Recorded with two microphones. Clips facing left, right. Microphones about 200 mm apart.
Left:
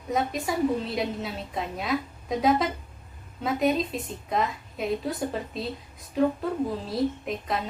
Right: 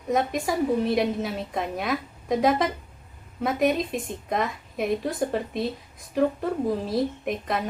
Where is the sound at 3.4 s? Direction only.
55° right (ahead or behind).